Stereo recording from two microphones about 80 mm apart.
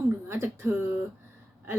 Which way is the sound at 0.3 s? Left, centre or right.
Right.